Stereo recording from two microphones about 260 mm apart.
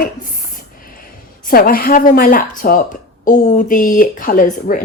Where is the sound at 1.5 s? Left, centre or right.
Left.